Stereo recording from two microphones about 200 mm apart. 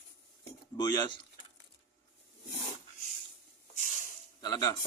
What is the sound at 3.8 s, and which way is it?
Snake, 40° left (ahead or behind).